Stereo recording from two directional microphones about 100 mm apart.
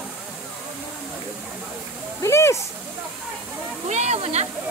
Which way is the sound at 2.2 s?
30° left (ahead or behind).